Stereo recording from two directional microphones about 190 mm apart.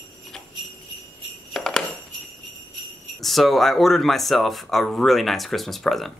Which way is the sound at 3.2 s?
Centre (ahead or behind).